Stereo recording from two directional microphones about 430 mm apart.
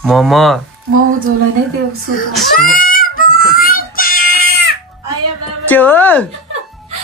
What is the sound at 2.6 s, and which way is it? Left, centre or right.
Cat, centre.